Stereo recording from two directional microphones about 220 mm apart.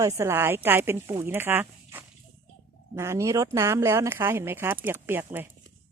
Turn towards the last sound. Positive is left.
turn(degrees=-10)  # may be behind; listen again after turning